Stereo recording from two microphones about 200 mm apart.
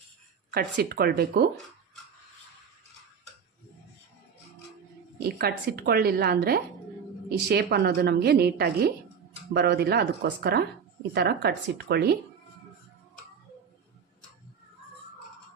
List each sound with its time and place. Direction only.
0.5 s a woman's voice: 50° right (ahead or behind)
5.2 s a woman's voice: 50° right (ahead or behind)